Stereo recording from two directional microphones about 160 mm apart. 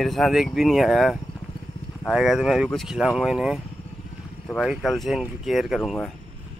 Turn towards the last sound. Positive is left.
turn(degrees=0)  # may be behind; listen again after turning